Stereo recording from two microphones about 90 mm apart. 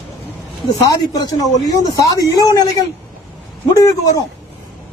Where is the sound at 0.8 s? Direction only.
40° left (ahead or behind).